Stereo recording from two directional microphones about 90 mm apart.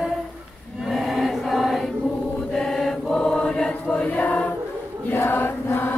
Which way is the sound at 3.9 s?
15° left (ahead or behind).